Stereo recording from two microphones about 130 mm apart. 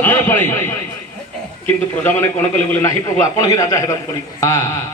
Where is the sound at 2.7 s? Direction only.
20° left (ahead or behind).